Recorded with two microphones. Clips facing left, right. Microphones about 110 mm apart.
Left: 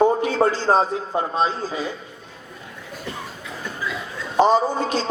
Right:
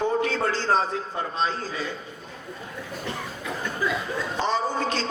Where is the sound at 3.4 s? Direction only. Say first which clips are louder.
Right 3 dB; 55° right (ahead or behind).